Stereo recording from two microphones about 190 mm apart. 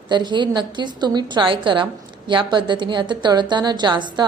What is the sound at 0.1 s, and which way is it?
A woman's voice, 25° right (ahead or behind).